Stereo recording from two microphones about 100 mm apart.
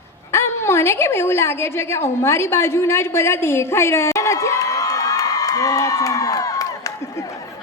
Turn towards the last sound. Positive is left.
turn(degrees=35)  # may be behind; listen again after turning